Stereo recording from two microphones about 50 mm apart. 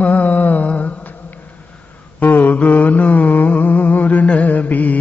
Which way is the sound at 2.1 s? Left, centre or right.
Left.